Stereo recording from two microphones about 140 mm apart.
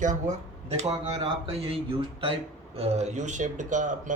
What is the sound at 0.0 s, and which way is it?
Speech, 60° right (ahead or behind).